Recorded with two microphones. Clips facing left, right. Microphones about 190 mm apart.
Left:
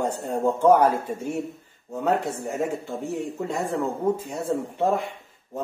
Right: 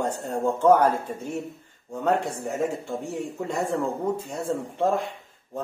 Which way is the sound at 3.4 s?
Centre (ahead or behind).